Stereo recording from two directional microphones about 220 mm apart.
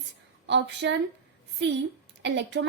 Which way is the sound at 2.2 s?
55° right (ahead or behind).